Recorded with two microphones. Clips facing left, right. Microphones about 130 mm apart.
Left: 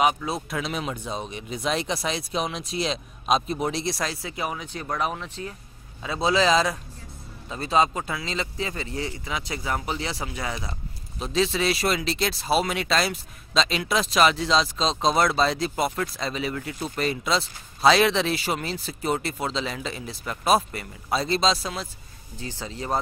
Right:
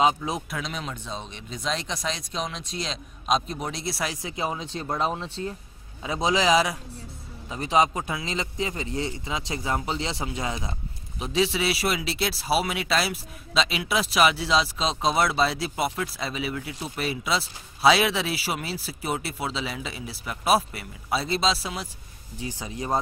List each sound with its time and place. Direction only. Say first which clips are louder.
0.0 s speech: even; 20° right (ahead or behind)
0.5 s speech: left 4 dB; 5° left (ahead or behind)
4.1 s speech: right 1 dB; 20° right (ahead or behind)
6.0 s speech: left 1 dB; 15° right (ahead or behind)